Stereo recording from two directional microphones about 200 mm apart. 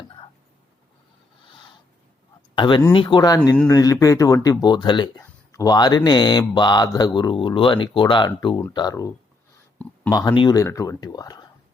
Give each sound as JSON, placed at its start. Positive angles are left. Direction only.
{"t": 2.6, "sound": "speech", "side_deg": 25}
{"t": 9.7, "sound": "a sound", "side_deg": 10}
{"t": 10.2, "sound": "speech", "side_deg": 20}